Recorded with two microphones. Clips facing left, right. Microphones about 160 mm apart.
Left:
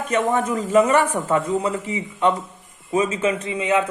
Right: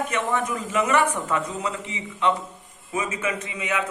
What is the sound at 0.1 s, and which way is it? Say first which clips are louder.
A man's voice: left 5 dB; 35° left (ahead or behind).